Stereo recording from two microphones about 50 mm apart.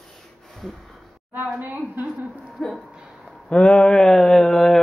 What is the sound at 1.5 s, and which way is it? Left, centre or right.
Speech, right.